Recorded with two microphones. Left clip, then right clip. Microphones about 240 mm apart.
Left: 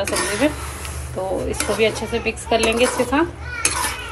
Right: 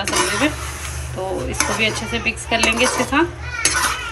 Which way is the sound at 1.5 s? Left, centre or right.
Centre.